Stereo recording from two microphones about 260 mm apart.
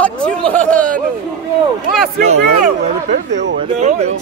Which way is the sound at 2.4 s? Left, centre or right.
Right.